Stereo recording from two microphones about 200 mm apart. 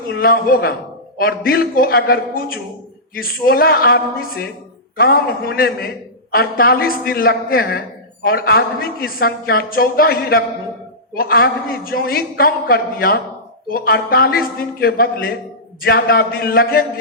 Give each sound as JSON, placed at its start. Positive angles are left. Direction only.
{"t": 0.1, "sound": "a man's voice", "side_deg": 50}